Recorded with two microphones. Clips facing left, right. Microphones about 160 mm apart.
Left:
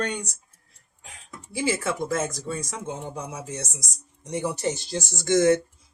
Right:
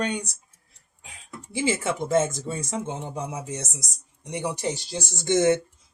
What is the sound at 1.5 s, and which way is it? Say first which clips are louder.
Speech: right 1 dB; 20° right (ahead or behind).